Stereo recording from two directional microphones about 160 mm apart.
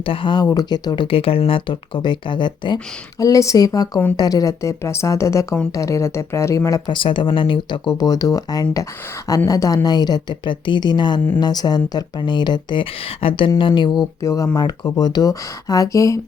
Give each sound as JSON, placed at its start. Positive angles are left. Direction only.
{"t": 0.0, "sound": "speech", "side_deg": 35}